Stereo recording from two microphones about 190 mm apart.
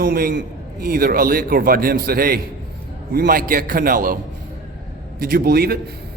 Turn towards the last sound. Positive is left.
turn(degrees=-55)  # may be behind; listen again after turning